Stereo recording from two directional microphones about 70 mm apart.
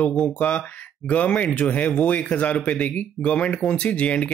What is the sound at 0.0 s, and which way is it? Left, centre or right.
Speech, centre.